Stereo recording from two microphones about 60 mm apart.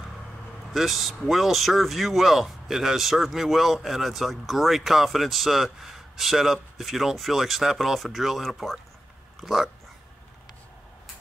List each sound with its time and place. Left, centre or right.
0.7 s speech: centre